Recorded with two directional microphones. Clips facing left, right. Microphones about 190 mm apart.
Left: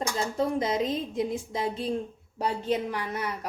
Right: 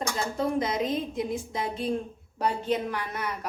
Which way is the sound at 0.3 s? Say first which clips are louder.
Left 1 dB; 30° left (ahead or behind).